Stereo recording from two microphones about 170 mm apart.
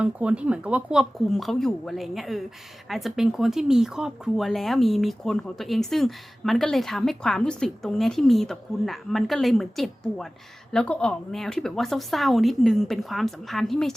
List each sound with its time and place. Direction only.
0.0 s speech: 5° right (ahead or behind)